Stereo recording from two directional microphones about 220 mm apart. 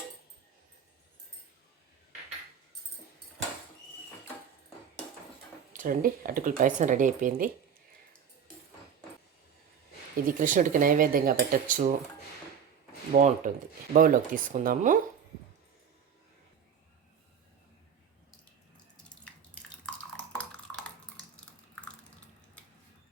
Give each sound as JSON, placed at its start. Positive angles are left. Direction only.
{"t": 5.7, "sound": "speech", "side_deg": -40}
{"t": 10.2, "sound": "speech", "side_deg": -35}
{"t": 13.1, "sound": "speech", "side_deg": -35}
{"t": 19.0, "sound": "drip", "side_deg": 5}